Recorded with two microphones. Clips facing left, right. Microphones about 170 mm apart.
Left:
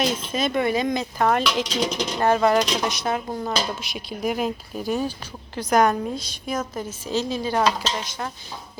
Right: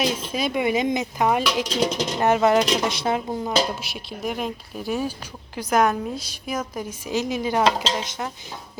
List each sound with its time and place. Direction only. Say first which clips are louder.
0.0 s a woman's voice: left 1 dB; 10° right (ahead or behind)
2.1 s speech: even; 20° right (ahead or behind)
3.2 s a woman's voice: right 3 dB; 10° right (ahead or behind)
3.9 s a woman's voice: left 3 dB; centre (ahead or behind); by 8.3 s 20° right (ahead or behind)